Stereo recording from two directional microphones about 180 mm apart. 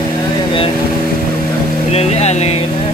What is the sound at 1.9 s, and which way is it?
Vehicle, 35° left (ahead or behind).